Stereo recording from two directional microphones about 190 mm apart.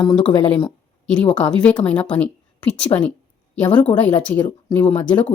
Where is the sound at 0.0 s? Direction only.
25° left (ahead or behind).